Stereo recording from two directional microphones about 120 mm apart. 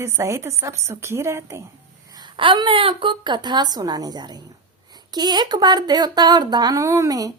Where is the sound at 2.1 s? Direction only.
35° right (ahead or behind).